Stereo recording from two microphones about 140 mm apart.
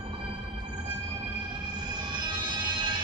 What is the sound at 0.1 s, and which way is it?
Music, 35° right (ahead or behind).